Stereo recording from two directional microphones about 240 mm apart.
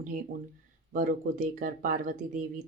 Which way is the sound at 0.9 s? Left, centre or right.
Right.